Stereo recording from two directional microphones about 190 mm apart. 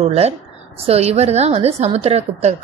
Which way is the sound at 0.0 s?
35° right (ahead or behind).